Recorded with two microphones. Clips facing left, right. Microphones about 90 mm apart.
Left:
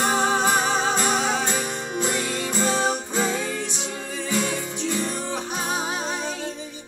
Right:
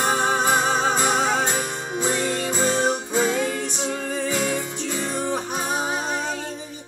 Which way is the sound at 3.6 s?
45° right (ahead or behind).